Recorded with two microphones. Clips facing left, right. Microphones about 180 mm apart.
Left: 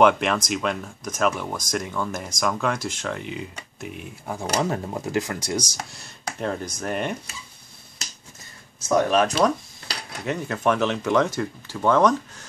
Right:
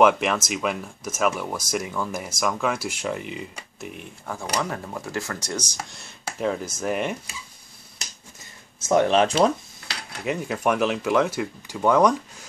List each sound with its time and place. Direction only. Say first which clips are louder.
0.0 s speech: even; 5° right (ahead or behind)
4.3 s speech: left 3 dB; 20° left (ahead or behind)
5.9 s speech: right 1 dB; centre (ahead or behind)
8.8 s speech: right 1 dB; 25° right (ahead or behind)
10.2 s speech: left 1 dB; 10° right (ahead or behind)